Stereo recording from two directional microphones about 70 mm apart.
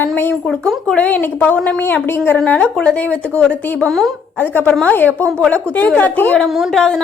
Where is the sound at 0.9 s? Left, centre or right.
Left.